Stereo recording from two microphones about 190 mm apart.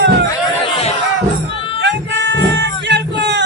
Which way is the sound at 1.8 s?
65° right (ahead or behind).